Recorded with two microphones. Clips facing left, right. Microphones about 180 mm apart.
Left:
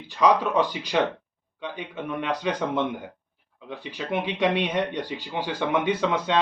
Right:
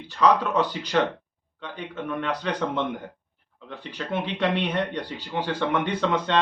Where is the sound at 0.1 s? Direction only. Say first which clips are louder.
Even; 10° left (ahead or behind).